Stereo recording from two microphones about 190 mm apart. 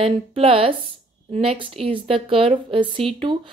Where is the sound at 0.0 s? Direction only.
30° right (ahead or behind).